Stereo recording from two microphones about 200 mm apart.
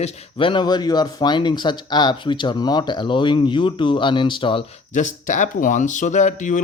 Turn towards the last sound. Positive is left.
turn(degrees=40)  # may be behind; listen again after turning